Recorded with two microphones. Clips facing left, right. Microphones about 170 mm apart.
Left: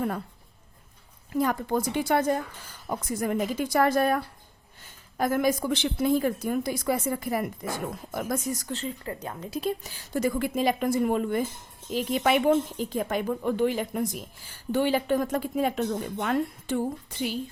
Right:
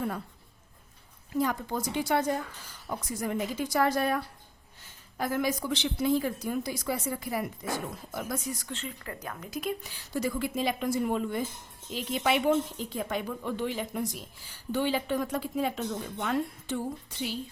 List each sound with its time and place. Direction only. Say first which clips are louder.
1.4 s a woman's voice: left 4 dB; 55° left (ahead or behind); by 9.9 s 30° left (ahead or behind)
10.1 s a woman's voice: left 4 dB; 55° left (ahead or behind)